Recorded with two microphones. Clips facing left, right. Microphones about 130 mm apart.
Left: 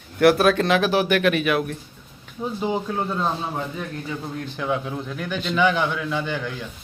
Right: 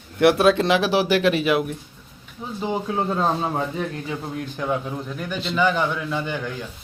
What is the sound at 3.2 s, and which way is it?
Speech, 40° right (ahead or behind).